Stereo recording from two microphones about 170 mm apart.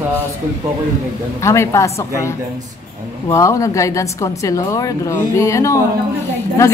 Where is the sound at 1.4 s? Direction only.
15° left (ahead or behind).